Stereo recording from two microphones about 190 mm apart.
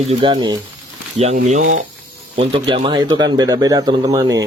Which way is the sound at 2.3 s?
30° right (ahead or behind).